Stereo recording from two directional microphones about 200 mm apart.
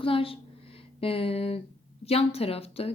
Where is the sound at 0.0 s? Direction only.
25° left (ahead or behind).